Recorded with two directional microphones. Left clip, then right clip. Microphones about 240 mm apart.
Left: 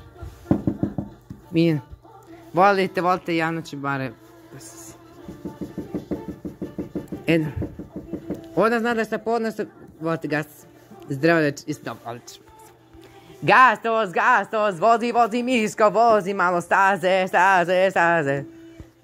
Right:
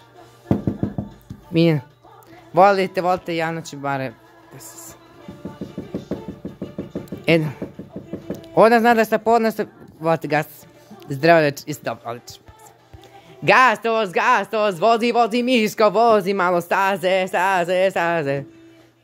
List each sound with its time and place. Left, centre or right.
1.5 s speech: centre
7.2 s speech: right
13.4 s speech: centre